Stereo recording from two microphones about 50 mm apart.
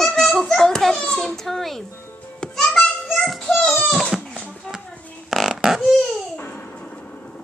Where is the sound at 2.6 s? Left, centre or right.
Centre.